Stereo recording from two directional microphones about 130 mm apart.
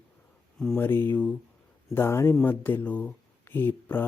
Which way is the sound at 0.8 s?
15° left (ahead or behind).